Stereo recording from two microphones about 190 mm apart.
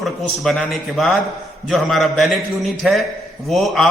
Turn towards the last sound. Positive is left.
turn(degrees=0)  # may be behind; listen again after turning